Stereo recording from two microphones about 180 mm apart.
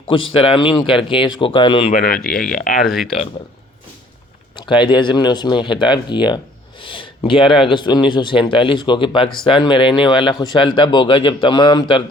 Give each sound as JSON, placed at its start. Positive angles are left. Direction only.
{"t": 0.1, "sound": "a man's voice", "side_deg": 30}
{"t": 1.9, "sound": "speech", "side_deg": 50}
{"t": 2.8, "sound": "speech", "side_deg": 0}
{"t": 4.5, "sound": "a man's voice", "side_deg": 25}